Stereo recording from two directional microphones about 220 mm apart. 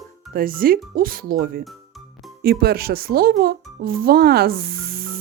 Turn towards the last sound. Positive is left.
turn(degrees=-45)  # may be behind; listen again after turning